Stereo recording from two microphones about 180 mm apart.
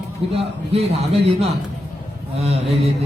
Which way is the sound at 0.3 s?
35° right (ahead or behind).